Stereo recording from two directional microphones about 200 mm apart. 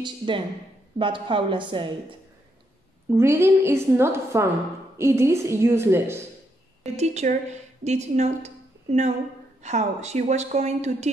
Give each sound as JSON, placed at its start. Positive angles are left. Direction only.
{"t": 0.0, "sound": "a woman's voice", "side_deg": -25}
{"t": 3.1, "sound": "a woman's voice", "side_deg": -15}
{"t": 6.8, "sound": "a woman's voice", "side_deg": -35}
{"t": 9.6, "sound": "a woman's voice", "side_deg": -35}